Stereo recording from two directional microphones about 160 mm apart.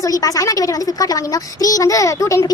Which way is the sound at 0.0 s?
20° left (ahead or behind).